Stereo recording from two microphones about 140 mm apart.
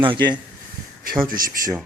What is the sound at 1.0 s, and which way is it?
Speech, 85° right.